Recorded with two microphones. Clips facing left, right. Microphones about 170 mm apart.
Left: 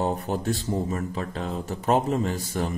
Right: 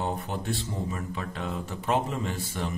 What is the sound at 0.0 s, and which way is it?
Speech, 40° left (ahead or behind).